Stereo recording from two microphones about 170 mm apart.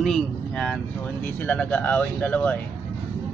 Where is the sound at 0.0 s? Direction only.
5° left (ahead or behind).